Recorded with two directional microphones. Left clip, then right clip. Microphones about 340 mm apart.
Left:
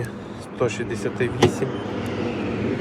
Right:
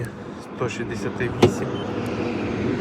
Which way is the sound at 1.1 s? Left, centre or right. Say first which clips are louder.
Right 1 dB; right.